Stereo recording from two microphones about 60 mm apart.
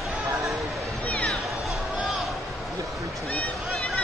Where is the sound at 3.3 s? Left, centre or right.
Left.